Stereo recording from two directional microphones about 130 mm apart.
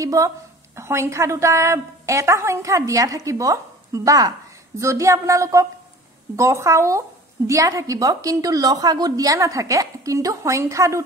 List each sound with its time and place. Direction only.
0.0 s a woman's voice: 25° right (ahead or behind)